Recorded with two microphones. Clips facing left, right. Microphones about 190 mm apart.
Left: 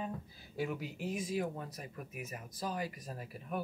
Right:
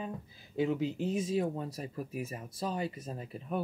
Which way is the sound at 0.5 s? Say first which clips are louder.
Right 8 dB; 25° right (ahead or behind).